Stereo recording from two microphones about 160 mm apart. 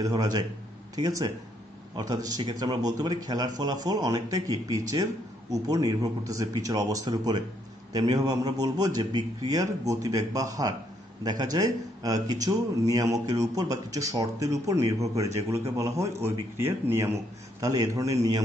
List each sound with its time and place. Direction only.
0.0 s speech: 25° right (ahead or behind)